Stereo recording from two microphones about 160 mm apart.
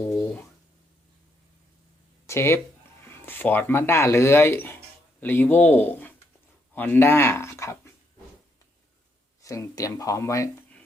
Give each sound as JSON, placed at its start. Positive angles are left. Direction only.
{"t": 0.0, "sound": "speech", "side_deg": 10}
{"t": 2.2, "sound": "speech", "side_deg": 15}
{"t": 9.4, "sound": "speech", "side_deg": 20}